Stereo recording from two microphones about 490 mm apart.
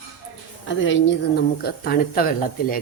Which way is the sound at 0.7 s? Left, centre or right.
Left.